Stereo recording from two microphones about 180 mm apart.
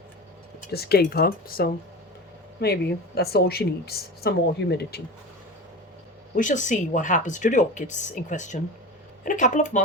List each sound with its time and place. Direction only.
0.7 s speech: 60° left (ahead or behind)
6.3 s speech: 45° left (ahead or behind)